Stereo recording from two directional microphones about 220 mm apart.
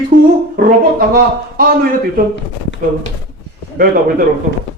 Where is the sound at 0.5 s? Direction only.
40° right (ahead or behind).